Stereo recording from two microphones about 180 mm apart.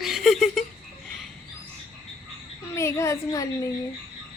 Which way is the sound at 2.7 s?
15° left (ahead or behind).